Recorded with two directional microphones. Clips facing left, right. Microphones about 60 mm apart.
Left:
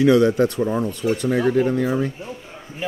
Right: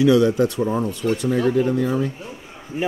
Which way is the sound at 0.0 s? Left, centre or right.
Left.